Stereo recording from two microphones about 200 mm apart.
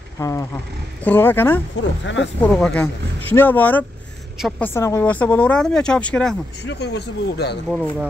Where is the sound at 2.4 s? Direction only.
5° left (ahead or behind).